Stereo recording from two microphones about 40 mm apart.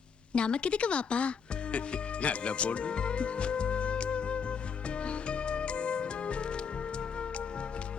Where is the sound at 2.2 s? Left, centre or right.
Left.